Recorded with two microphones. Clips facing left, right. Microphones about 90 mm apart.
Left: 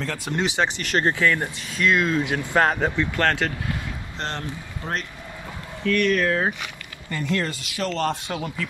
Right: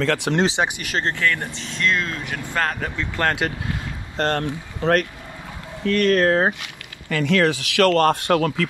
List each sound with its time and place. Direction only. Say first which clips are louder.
0.0 s speech: right 8 dB; 80° right
0.7 s speech: left 2 dB; 5° right (ahead or behind)
1.0 s speech: left 1 dB; 10° left (ahead or behind)
3.2 s speech: right 1 dB; 10° right (ahead or behind)
4.2 s speech: right 9 dB; 55° right (ahead or behind)
5.9 s speech: right 3 dB; 40° right (ahead or behind)
7.1 s speech: right 7 dB; 90° right